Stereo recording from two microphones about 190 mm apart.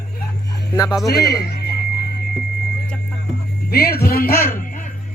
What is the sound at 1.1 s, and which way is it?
Speech, 55° left (ahead or behind).